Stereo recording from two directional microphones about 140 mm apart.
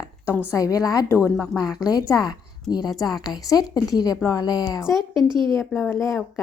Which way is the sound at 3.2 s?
25° left (ahead or behind).